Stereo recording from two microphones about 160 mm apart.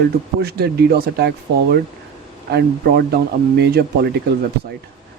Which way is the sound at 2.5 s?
80° right.